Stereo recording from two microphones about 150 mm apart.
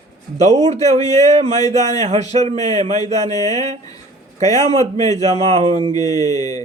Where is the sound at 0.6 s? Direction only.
50° right (ahead or behind).